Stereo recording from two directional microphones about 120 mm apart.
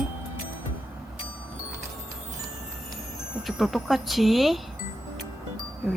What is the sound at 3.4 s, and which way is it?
Speech, centre (ahead or behind).